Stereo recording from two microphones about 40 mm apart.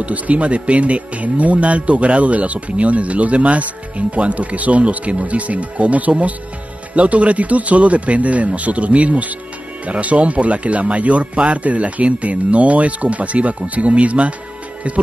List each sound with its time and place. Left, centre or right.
0.0 s speech: right